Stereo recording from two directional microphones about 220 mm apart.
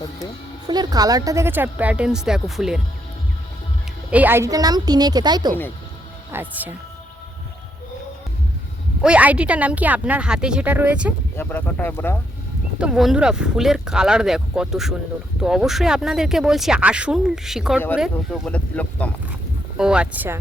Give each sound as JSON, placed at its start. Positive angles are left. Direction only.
{"t": 0.7, "sound": "speech", "side_deg": -20}
{"t": 4.1, "sound": "speech", "side_deg": -10}
{"t": 6.3, "sound": "speech", "side_deg": -10}
{"t": 9.0, "sound": "speech", "side_deg": -5}
{"t": 11.3, "sound": "speech", "side_deg": 10}
{"t": 12.8, "sound": "speech", "side_deg": 0}